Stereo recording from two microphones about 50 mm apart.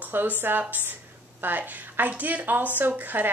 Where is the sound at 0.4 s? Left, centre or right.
Right.